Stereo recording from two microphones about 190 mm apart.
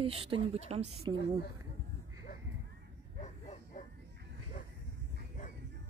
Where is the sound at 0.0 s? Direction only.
30° right (ahead or behind).